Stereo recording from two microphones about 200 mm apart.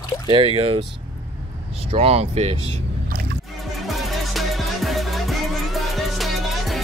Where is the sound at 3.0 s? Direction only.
50° right (ahead or behind).